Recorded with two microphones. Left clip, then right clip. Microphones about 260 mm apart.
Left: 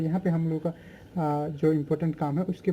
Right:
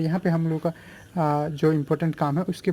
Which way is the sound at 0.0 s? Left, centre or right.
Right.